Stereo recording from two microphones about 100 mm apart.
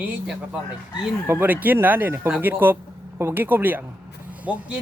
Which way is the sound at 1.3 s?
20° right (ahead or behind).